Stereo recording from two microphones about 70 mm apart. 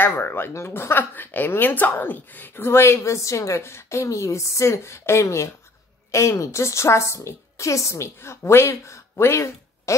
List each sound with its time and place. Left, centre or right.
0.0 s a woman's voice: left